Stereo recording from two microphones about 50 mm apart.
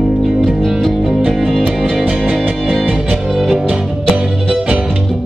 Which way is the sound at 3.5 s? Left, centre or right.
Centre.